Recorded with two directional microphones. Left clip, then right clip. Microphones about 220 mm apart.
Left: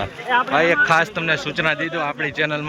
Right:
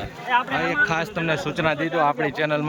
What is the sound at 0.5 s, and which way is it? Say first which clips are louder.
Speech: left 6 dB; 10° right (ahead or behind).